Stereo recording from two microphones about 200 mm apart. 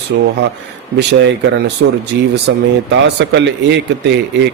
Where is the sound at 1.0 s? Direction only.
60° right (ahead or behind).